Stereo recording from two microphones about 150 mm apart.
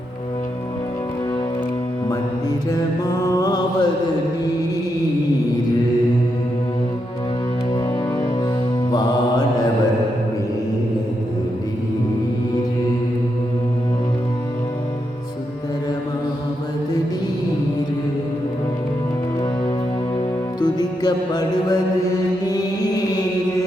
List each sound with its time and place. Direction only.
2.0 s mantra: 25° left (ahead or behind)
8.9 s mantra: 30° left (ahead or behind)
20.6 s music: 25° left (ahead or behind)